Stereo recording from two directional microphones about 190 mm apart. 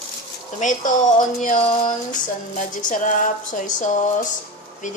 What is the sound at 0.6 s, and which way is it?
Speech, 40° left (ahead or behind).